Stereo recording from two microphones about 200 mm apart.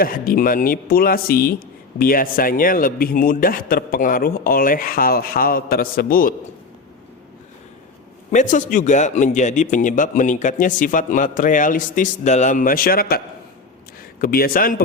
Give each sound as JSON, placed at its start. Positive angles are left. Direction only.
{"t": 0.0, "sound": "speech", "side_deg": 45}
{"t": 8.3, "sound": "speech", "side_deg": 40}